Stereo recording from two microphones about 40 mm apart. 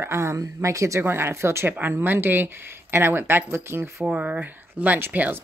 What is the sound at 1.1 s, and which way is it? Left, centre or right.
Speech, right.